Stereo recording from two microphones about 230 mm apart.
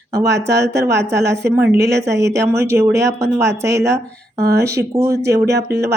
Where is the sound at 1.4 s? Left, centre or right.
Centre.